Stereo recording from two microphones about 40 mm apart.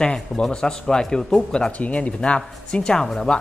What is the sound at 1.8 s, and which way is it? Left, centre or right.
Speech, left.